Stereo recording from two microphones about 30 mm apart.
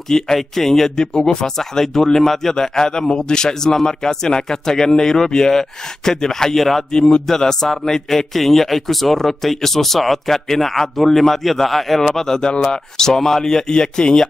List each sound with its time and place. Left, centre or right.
0.4 s a man's voice: centre
0.9 s a man's voice: left
6.5 s a man's voice: centre
6.9 s a man's voice: left